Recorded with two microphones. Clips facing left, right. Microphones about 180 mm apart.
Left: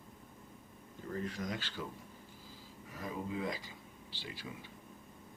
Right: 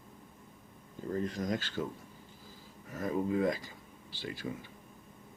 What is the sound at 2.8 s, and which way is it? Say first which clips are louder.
Speech: right 8 dB; 45° right (ahead or behind).